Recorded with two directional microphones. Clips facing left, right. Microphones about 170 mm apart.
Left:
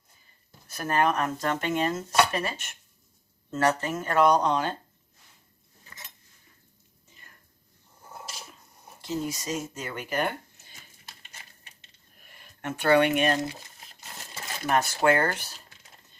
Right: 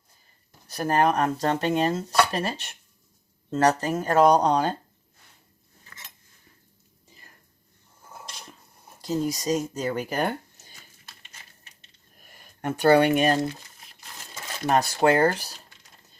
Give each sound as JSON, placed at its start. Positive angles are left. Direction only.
{"t": 0.7, "sound": "speech", "side_deg": -35}
{"t": 8.3, "sound": "a sound", "side_deg": 5}
{"t": 9.0, "sound": "speech", "side_deg": -35}
{"t": 12.2, "sound": "speech", "side_deg": -40}
{"t": 14.7, "sound": "speech", "side_deg": -35}